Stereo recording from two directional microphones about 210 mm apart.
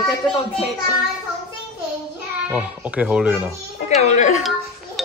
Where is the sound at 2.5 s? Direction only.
5° right (ahead or behind).